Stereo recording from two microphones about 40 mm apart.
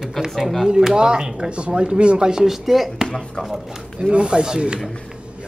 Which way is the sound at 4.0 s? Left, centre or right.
Right.